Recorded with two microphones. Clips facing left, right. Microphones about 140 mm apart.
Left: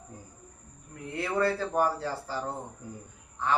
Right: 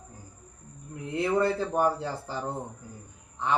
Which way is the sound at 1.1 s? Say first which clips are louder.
Right 3 dB; 20° right (ahead or behind).